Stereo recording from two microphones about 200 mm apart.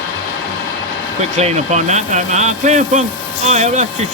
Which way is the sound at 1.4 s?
35° right (ahead or behind).